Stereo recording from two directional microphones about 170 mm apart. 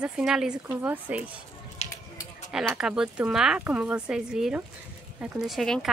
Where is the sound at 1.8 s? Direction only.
40° left (ahead or behind).